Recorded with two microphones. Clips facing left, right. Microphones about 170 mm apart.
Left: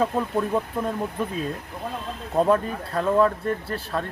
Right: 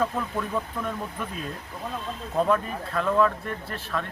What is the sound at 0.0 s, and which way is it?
Speech, 30° left (ahead or behind).